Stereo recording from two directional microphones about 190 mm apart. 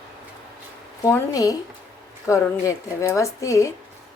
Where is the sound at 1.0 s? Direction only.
15° left (ahead or behind).